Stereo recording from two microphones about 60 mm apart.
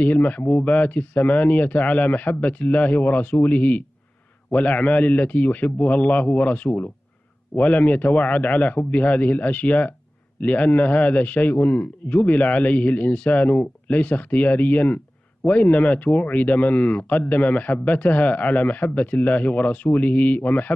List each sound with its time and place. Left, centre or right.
0.0 s speech: left